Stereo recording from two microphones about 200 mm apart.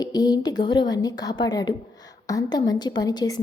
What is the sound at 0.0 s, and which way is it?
A woman's voice, 20° left (ahead or behind).